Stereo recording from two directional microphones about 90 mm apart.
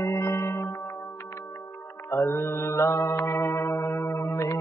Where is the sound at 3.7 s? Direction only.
35° left (ahead or behind).